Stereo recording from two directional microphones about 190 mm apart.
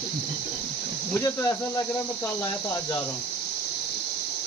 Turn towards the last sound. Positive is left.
turn(degrees=15)  # may be behind; listen again after turning